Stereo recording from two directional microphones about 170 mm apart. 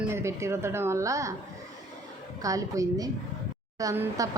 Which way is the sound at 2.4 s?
20° right (ahead or behind).